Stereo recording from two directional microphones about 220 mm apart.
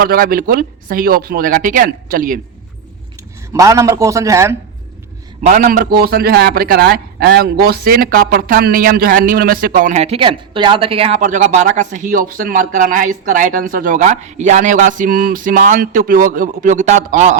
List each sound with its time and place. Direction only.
0.0 s a man's voice: 40° right (ahead or behind)
3.5 s a man's voice: 15° right (ahead or behind)
5.4 s a man's voice: 35° right (ahead or behind)